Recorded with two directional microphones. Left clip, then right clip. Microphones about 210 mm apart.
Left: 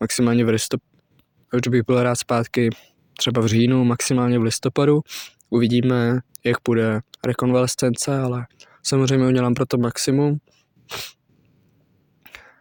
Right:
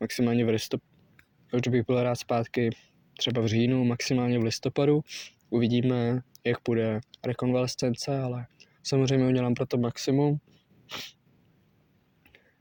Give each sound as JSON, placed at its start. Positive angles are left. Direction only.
{"t": 0.0, "sound": "speech", "side_deg": 55}
{"t": 10.8, "sound": "sneeze", "side_deg": 55}
{"t": 12.2, "sound": "a sound", "side_deg": 50}